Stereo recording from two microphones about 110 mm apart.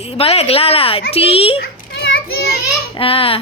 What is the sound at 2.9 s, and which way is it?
Speech, 55° left (ahead or behind).